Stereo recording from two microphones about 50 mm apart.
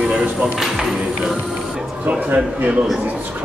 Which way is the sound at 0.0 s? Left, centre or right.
Centre.